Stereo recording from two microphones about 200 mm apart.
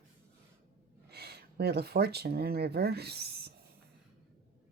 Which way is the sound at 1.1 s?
55° right (ahead or behind).